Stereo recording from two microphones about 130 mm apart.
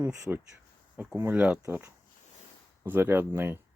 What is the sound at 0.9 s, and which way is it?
Speech, 15° right (ahead or behind).